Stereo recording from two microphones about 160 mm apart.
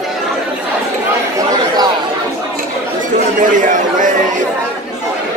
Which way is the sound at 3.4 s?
55° right (ahead or behind).